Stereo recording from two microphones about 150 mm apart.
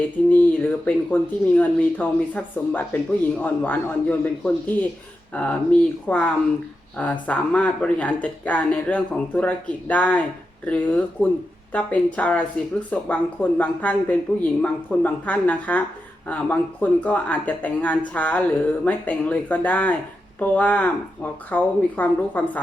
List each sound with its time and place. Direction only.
0.9 s speech: 10° left (ahead or behind)